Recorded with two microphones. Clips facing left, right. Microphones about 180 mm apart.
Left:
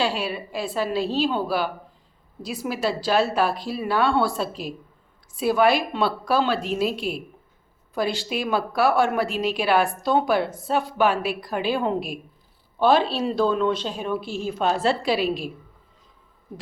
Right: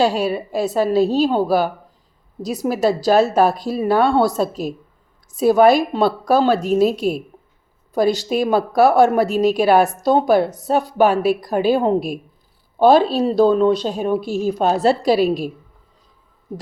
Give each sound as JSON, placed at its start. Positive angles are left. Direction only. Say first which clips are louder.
{"t": 0.0, "sound": "a woman's voice", "louder": "right 8 dB", "side_deg": -45}